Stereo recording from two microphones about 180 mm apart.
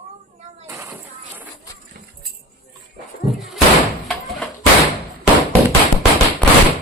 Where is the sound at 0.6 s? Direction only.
15° right (ahead or behind).